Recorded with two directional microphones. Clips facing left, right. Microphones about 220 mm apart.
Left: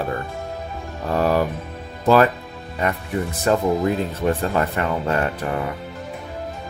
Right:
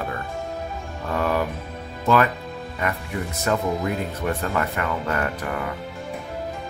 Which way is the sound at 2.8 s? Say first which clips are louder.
Left 5 dB; 30° left (ahead or behind).